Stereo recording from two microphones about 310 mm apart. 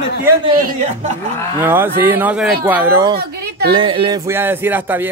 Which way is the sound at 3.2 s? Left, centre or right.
Right.